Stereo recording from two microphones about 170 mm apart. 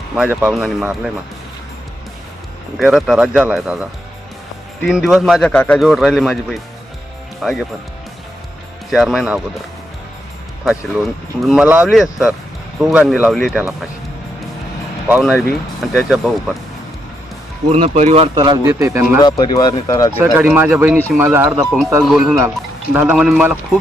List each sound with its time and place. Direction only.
0.2 s speech: 10° right (ahead or behind)
2.7 s speech: 5° right (ahead or behind)
4.9 s speech: centre (ahead or behind)
8.9 s speech: centre (ahead or behind)
10.7 s speech: centre (ahead or behind)
15.0 s speech: 5° right (ahead or behind)
17.7 s speech: 40° right (ahead or behind)
18.3 s speech: 25° right (ahead or behind)
19.2 s speech: 25° left (ahead or behind)
20.3 s speech: 10° right (ahead or behind)
20.9 s speech: 5° left (ahead or behind)
21.2 s speech: 15° right (ahead or behind)
22.0 s speech: centre (ahead or behind)
22.4 s speech: 10° right (ahead or behind)